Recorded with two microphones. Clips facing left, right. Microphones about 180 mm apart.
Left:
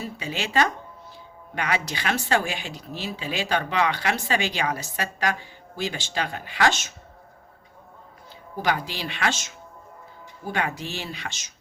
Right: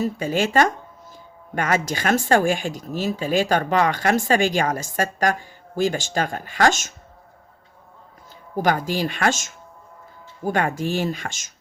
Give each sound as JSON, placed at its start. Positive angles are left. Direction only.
{"t": 0.0, "sound": "speech", "side_deg": -45}
{"t": 8.5, "sound": "speech", "side_deg": -45}